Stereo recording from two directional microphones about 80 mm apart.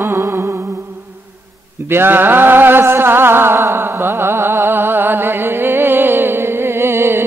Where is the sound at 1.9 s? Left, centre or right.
Right.